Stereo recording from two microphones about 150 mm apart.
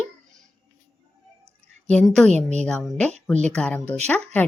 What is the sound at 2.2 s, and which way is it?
Speech, 50° right (ahead or behind).